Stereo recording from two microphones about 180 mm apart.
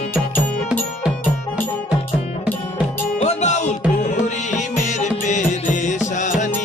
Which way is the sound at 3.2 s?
40° left (ahead or behind).